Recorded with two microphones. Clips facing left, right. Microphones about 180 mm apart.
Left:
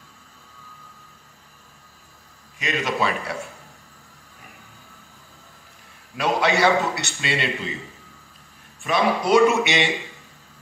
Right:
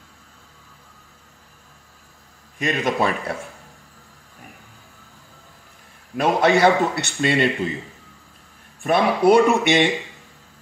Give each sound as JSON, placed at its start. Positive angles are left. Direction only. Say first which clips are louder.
{"t": 2.6, "sound": "a man's voice", "louder": "right 3 dB", "side_deg": -50}
{"t": 6.1, "sound": "a man's voice", "louder": "right 4 dB", "side_deg": -50}
{"t": 8.8, "sound": "speech", "louder": "right 5 dB", "side_deg": -55}